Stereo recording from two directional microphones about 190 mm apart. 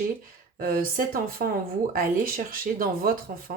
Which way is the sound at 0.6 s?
50° right (ahead or behind).